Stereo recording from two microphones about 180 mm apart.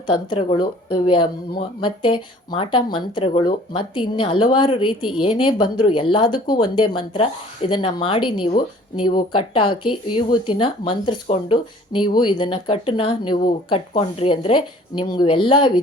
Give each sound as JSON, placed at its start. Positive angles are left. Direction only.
{"t": 0.1, "sound": "speech", "side_deg": 30}